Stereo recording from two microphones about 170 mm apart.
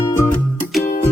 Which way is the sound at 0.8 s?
50° left (ahead or behind).